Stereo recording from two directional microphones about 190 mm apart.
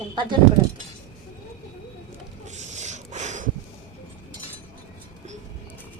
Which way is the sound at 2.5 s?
35° right (ahead or behind).